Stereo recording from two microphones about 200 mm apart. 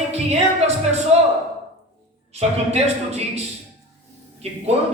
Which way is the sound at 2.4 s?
30° right (ahead or behind).